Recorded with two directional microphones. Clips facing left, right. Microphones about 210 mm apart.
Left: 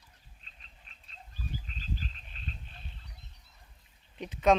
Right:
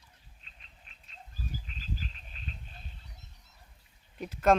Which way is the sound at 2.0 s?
40° left (ahead or behind).